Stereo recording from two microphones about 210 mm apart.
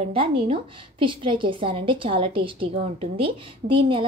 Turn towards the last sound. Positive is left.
turn(degrees=-25)  # may be behind; listen again after turning